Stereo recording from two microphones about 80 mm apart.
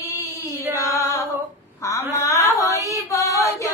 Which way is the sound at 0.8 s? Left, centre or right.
Left.